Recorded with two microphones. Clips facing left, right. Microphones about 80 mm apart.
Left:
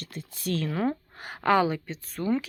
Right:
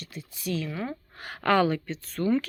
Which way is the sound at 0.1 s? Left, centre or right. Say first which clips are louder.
Left 1 dB; left.